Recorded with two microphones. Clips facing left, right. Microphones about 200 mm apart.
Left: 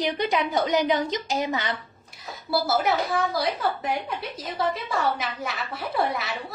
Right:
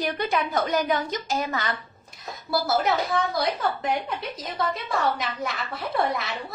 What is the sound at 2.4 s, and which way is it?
A woman's voice, 5° left (ahead or behind).